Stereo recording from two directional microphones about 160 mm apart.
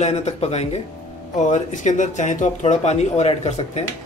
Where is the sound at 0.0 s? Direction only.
40° left (ahead or behind).